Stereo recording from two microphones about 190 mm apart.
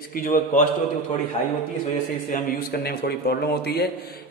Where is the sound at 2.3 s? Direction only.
55° left (ahead or behind).